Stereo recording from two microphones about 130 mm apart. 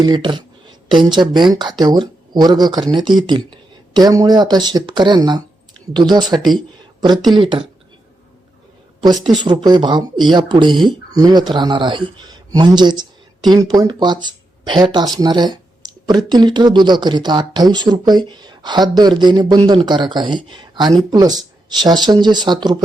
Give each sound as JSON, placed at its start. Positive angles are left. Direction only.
{"t": 0.0, "sound": "speech", "side_deg": -35}
{"t": 9.0, "sound": "a woman's voice", "side_deg": -35}